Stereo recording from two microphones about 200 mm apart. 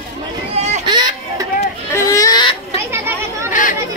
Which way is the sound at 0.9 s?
20° right (ahead or behind).